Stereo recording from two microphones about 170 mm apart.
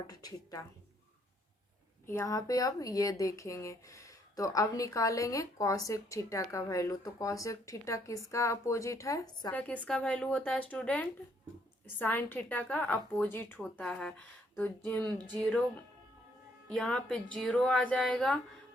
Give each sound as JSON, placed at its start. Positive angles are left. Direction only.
{"t": 0.1, "sound": "speech", "side_deg": 20}
{"t": 2.0, "sound": "speech", "side_deg": 15}
{"t": 9.5, "sound": "a woman's voice", "side_deg": 10}